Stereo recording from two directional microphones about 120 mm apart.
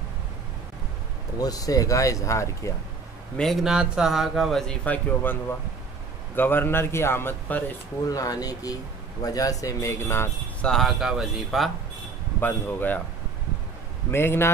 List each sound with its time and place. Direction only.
1.4 s speech: 30° left (ahead or behind)
3.3 s a man's voice: centre (ahead or behind); by 7.7 s 15° left (ahead or behind)
8.1 s speech: 30° left (ahead or behind)
10.6 s a man's voice: 5° left (ahead or behind)
12.4 s speech: 15° left (ahead or behind)
14.1 s speech: 20° left (ahead or behind)